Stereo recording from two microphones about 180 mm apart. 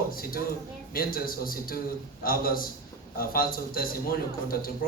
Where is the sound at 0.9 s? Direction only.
55° left (ahead or behind).